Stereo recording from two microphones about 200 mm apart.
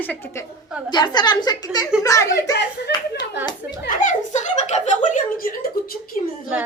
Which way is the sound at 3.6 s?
45° left (ahead or behind).